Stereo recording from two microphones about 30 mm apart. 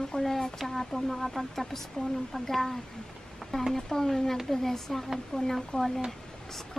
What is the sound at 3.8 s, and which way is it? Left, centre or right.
Speech, centre.